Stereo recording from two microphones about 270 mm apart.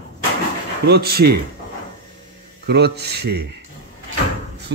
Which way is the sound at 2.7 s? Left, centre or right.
Right.